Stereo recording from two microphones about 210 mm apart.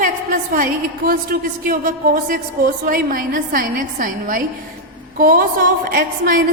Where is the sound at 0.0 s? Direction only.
40° right (ahead or behind).